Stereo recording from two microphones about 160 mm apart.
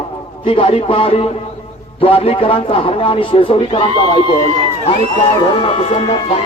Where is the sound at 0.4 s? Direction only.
35° left (ahead or behind).